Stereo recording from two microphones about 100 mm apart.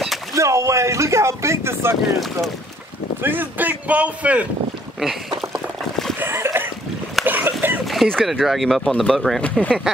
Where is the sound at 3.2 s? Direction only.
20° right (ahead or behind).